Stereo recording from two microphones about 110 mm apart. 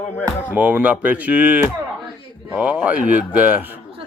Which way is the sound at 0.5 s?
15° right (ahead or behind).